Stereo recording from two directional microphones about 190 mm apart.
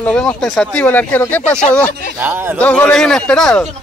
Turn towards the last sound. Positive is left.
turn(degrees=5)  # may be behind; listen again after turning